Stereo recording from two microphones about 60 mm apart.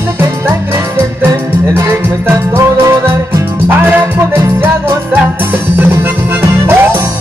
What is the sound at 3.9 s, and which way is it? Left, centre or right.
Music, right.